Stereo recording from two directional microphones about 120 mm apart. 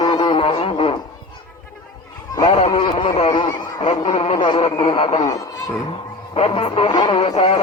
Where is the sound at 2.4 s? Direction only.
55° left (ahead or behind).